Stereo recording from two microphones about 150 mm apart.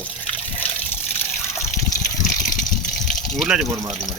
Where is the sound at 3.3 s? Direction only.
Centre (ahead or behind).